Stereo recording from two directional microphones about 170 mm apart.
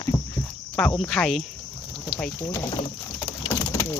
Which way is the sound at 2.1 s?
5° left (ahead or behind).